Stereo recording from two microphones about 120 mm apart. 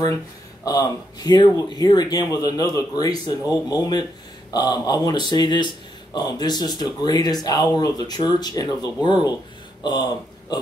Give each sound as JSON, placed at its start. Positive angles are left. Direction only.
{"t": 0.7, "sound": "speech", "side_deg": 30}